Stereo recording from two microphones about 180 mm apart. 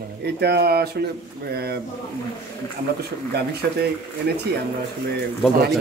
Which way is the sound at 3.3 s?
65° right (ahead or behind).